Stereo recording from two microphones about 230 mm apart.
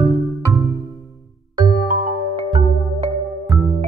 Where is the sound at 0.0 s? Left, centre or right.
Centre.